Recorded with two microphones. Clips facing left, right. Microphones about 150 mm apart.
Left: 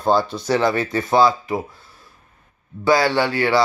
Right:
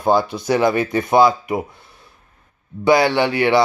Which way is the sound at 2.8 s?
20° right (ahead or behind).